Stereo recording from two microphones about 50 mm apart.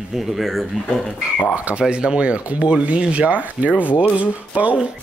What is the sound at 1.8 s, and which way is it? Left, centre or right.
Speech, centre.